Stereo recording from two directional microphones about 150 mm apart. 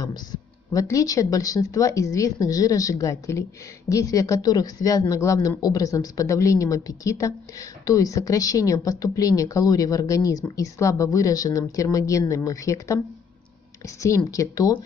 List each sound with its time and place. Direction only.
0.0 s a woman's voice: 25° left (ahead or behind)